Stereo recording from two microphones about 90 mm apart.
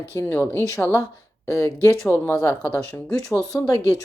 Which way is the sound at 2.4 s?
30° left (ahead or behind).